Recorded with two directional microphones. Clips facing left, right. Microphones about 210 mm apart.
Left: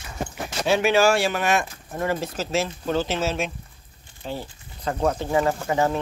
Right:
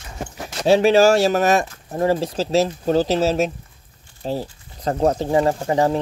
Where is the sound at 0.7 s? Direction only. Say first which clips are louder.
Right 6 dB; 35° right (ahead or behind).